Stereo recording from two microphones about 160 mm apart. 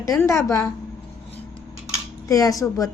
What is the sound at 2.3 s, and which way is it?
Speech, 20° left (ahead or behind).